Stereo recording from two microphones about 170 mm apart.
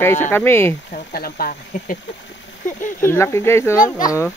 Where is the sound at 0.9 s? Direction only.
60° left (ahead or behind).